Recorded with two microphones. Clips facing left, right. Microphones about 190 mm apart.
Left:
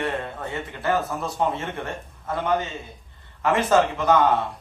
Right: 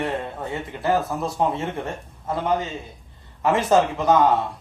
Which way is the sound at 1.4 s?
15° right (ahead or behind).